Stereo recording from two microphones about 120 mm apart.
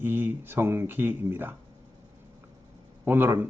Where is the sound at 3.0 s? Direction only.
15° right (ahead or behind).